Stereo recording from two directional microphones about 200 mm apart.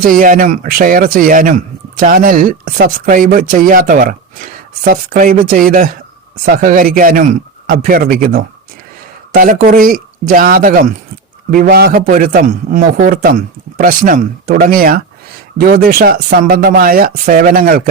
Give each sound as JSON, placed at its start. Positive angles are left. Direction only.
{"t": 0.0, "sound": "speech", "side_deg": -45}